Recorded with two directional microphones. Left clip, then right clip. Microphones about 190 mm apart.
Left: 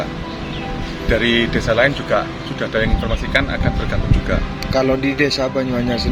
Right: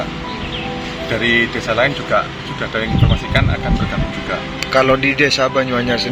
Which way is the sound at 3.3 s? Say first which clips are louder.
Left 1 dB; 30° left (ahead or behind).